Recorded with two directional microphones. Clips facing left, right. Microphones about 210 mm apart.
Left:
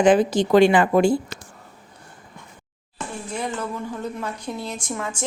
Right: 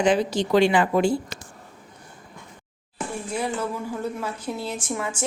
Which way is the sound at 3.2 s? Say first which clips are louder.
Right 1 dB; 10° right (ahead or behind).